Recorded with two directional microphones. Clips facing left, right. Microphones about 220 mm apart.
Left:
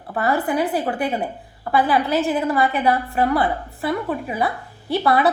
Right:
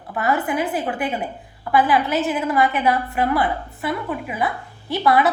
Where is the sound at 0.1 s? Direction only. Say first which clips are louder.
Left 1 dB; 35° left (ahead or behind).